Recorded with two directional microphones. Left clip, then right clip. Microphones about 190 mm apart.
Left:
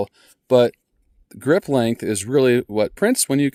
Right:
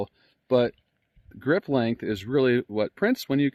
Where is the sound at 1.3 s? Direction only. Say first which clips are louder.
Left 6 dB; 80° left.